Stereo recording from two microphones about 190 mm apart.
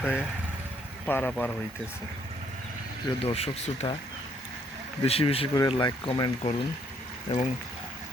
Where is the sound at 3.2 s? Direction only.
30° left (ahead or behind).